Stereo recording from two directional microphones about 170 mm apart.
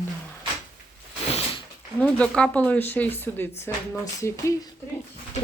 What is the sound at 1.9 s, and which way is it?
Speech, 10° left (ahead or behind).